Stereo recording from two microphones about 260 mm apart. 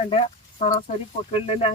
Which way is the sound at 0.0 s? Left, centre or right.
Left.